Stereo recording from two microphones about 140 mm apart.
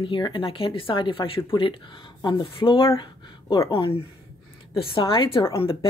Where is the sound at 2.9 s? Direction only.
30° left (ahead or behind).